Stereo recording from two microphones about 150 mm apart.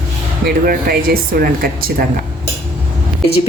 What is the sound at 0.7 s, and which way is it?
Speech, 80° right.